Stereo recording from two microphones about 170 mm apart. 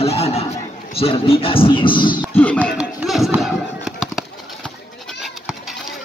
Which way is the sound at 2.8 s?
5° right (ahead or behind).